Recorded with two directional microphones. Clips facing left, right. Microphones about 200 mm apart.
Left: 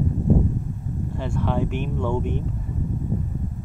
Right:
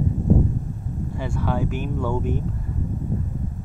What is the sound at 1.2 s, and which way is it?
Speech, 10° right (ahead or behind).